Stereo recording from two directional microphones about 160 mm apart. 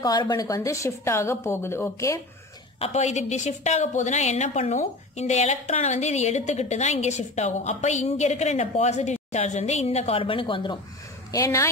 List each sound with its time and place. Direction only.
0.0 s a woman's voice: 25° left (ahead or behind)
2.8 s a woman's voice: 45° left (ahead or behind)
11.3 s a woman's voice: 20° left (ahead or behind)